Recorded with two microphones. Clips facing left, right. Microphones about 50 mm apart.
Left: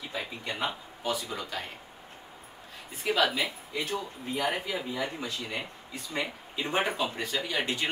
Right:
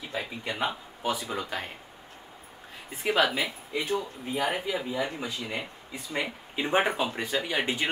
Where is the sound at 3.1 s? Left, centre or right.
Right.